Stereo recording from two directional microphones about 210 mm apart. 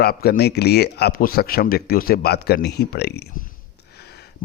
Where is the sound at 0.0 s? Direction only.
45° left (ahead or behind).